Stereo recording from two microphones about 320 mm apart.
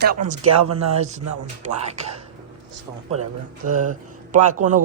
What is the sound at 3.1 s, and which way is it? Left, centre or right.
Speech, right.